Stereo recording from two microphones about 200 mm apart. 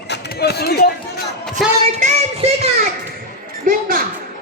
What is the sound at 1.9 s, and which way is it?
Child singing, 30° right (ahead or behind).